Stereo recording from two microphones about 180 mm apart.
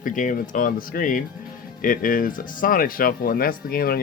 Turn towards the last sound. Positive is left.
turn(degrees=55)  # may be behind; listen again after turning